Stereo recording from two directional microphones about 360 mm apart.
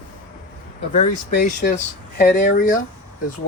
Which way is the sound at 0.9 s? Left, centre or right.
Centre.